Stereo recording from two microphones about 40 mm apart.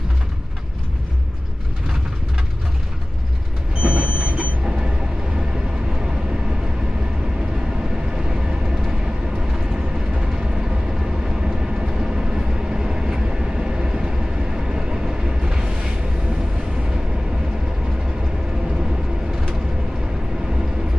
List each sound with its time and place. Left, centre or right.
3.8 s train: right
8.1 s vehicle: right